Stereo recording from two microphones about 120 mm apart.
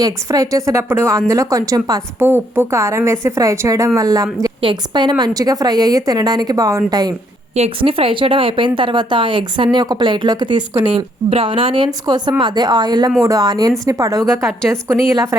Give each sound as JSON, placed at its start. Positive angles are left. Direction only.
{"t": 0.0, "sound": "speech", "side_deg": -30}
{"t": 2.1, "sound": "speech", "side_deg": -20}
{"t": 4.6, "sound": "speech", "side_deg": -40}
{"t": 7.5, "sound": "speech", "side_deg": -55}